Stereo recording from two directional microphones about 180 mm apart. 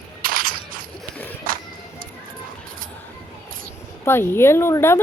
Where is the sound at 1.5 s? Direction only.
50° right (ahead or behind).